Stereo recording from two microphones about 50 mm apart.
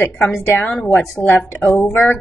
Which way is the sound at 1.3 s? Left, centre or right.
Left.